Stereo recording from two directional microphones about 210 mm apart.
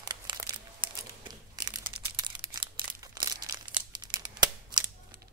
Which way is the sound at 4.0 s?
20° right (ahead or behind).